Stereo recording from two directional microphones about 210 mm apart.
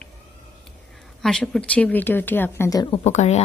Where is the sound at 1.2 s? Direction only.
Centre (ahead or behind).